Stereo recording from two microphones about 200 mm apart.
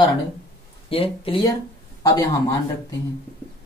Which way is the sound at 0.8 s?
30° left (ahead or behind).